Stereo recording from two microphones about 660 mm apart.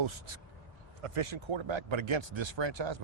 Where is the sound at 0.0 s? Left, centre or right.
Right.